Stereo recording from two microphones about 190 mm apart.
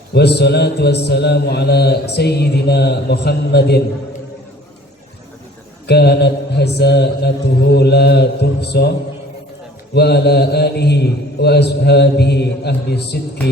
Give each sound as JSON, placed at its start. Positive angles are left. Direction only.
{"t": 0.1, "sound": "a man's voice", "side_deg": 60}
{"t": 5.8, "sound": "a man's voice", "side_deg": 60}
{"t": 9.9, "sound": "a man's voice", "side_deg": 60}